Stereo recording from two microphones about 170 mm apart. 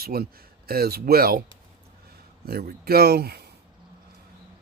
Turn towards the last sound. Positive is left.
turn(degrees=-65)  # may be behind; listen again after turning